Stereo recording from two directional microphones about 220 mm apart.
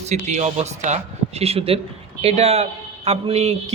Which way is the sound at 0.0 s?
30° right (ahead or behind).